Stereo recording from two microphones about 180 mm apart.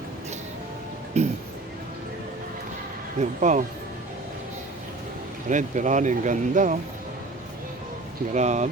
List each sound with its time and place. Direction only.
1.2 s speech: 35° right (ahead or behind)
3.2 s speech: 45° right (ahead or behind)
5.5 s speech: 45° right (ahead or behind)
8.3 s speech: 40° right (ahead or behind)